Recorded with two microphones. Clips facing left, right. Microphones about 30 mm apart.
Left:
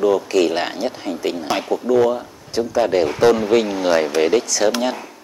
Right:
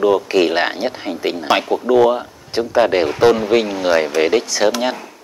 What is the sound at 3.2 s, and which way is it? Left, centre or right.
Speech, centre.